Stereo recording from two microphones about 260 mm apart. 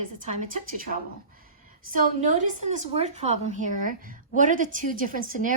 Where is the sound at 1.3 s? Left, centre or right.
Right.